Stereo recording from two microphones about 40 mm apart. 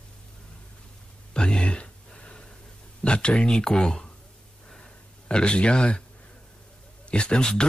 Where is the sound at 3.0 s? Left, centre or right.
Left.